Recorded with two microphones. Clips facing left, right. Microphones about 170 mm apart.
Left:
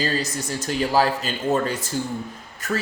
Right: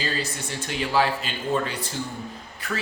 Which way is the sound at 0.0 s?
40° left (ahead or behind).